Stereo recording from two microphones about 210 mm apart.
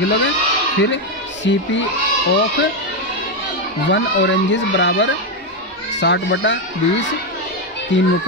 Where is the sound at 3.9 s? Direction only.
60° left (ahead or behind).